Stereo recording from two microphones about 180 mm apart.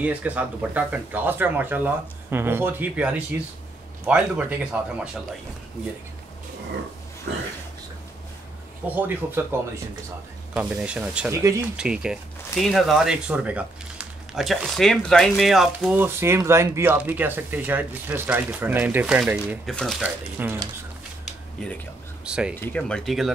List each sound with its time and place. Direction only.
0.0 s speech: 10° right (ahead or behind)
8.8 s speech: 10° right (ahead or behind)
11.3 s speech: 15° right (ahead or behind)
11.7 s speech: 5° right (ahead or behind)
16.0 s speech: 15° right (ahead or behind)
19.6 s speech: 5° left (ahead or behind)
20.0 s speech: 10° right (ahead or behind)
22.2 s speech: 5° right (ahead or behind)
22.6 s speech: 5° left (ahead or behind)